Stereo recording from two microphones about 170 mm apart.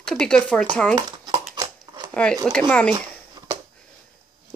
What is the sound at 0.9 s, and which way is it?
Dog, 25° right (ahead or behind).